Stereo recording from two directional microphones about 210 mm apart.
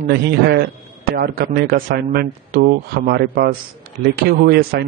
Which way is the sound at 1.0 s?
45° right (ahead or behind).